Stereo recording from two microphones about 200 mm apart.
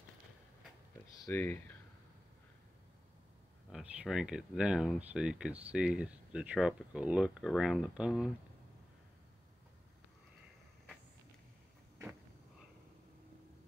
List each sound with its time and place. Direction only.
1.2 s speech: 10° left (ahead or behind)
3.7 s speech: 5° right (ahead or behind)